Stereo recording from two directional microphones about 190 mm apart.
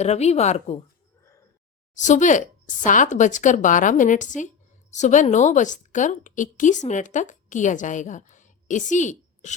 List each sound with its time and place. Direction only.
0.0 s speech: 35° left (ahead or behind)
0.8 s a sound: 15° left (ahead or behind)
2.0 s a woman's voice: 40° left (ahead or behind)